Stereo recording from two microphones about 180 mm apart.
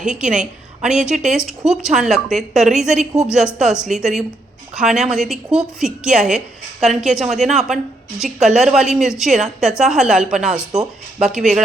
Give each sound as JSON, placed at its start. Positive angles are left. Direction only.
{"t": 0.1, "sound": "a woman's voice", "side_deg": -5}
{"t": 7.3, "sound": "speech", "side_deg": -40}
{"t": 7.5, "sound": "a woman's voice", "side_deg": 0}